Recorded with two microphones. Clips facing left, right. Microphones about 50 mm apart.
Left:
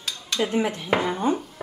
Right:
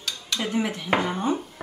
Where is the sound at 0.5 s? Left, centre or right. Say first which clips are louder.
Left 2 dB; left.